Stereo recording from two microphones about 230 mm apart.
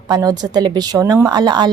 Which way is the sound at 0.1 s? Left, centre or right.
Centre.